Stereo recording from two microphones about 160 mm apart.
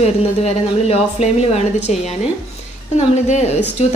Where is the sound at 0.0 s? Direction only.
40° left (ahead or behind).